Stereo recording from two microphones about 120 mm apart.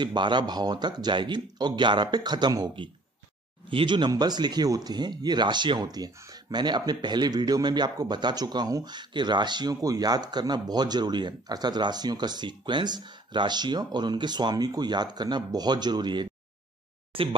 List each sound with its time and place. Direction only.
0.0 s speech: 40° right (ahead or behind)